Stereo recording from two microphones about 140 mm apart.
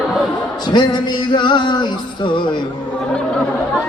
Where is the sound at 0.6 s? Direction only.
30° left (ahead or behind).